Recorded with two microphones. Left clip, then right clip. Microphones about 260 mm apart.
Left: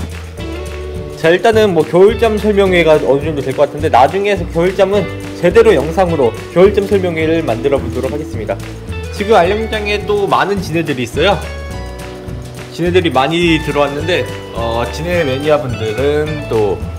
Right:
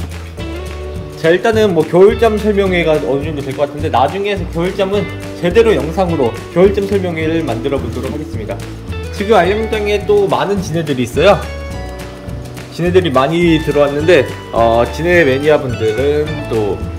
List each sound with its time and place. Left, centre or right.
1.2 s speech: centre
6.0 s speech: centre
9.2 s speech: centre
12.7 s speech: centre